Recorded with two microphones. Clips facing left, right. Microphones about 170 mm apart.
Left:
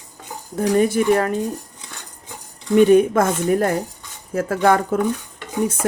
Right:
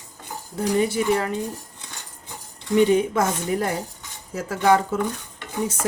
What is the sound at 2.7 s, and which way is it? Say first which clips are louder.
Speech: left 5 dB; 55° left (ahead or behind).